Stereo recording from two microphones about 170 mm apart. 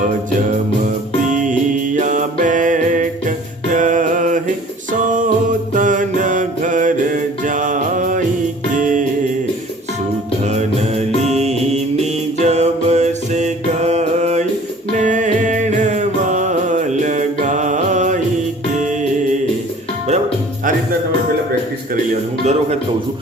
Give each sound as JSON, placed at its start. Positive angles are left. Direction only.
{"t": 2.0, "sound": "music", "side_deg": -50}
{"t": 4.9, "sound": "mantra", "side_deg": -50}
{"t": 8.8, "sound": "music", "side_deg": -50}
{"t": 10.5, "sound": "music", "side_deg": -40}
{"t": 22.1, "sound": "music", "side_deg": -40}